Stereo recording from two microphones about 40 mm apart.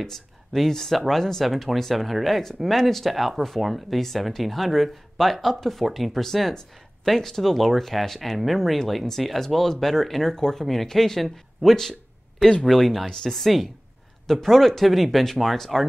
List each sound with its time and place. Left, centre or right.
0.0 s speech: centre
11.9 s a sound: centre
12.6 s speech: centre